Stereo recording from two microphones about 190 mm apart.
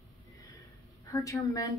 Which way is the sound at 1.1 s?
15° left (ahead or behind).